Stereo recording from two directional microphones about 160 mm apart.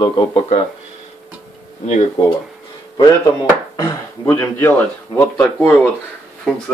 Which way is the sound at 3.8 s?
20° left (ahead or behind).